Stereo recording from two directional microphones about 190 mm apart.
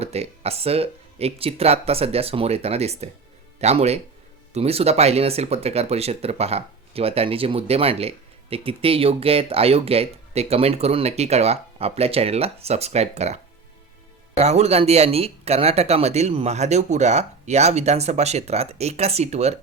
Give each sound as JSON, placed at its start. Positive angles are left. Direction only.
{"t": 0.0, "sound": "speech", "side_deg": -35}